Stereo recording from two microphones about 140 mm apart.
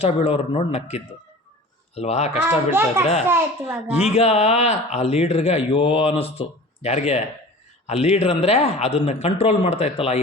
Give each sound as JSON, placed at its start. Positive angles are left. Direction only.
{"t": 0.0, "sound": "speech", "side_deg": 45}
{"t": 2.3, "sound": "a child's voice", "side_deg": -10}
{"t": 4.1, "sound": "speech", "side_deg": 50}